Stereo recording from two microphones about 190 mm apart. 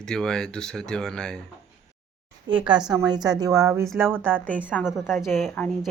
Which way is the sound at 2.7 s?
20° right (ahead or behind).